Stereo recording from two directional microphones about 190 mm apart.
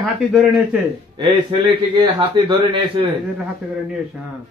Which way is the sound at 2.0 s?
25° right (ahead or behind).